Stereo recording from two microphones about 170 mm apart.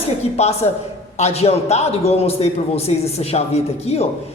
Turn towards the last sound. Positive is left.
turn(degrees=40)  # may be behind; listen again after turning